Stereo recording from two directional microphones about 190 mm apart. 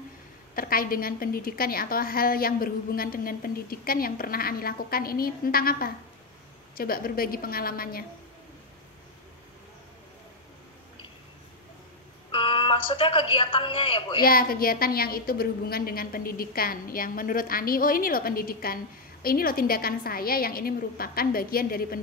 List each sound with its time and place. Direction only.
0.6 s a woman's voice: 50° left (ahead or behind)
12.3 s a woman's voice: 30° left (ahead or behind)
14.2 s a woman's voice: 50° left (ahead or behind)